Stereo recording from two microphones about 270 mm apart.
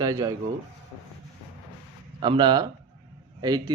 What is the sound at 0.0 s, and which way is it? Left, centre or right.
Speech, centre.